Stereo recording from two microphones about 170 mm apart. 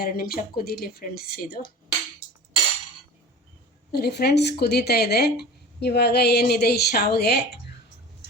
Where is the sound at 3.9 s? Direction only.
70° left (ahead or behind).